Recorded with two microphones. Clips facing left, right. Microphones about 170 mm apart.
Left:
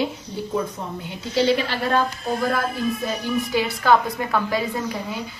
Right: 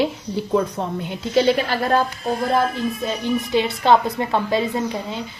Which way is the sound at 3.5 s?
25° right (ahead or behind).